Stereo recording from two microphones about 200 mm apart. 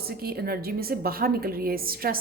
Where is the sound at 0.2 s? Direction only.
50° right (ahead or behind).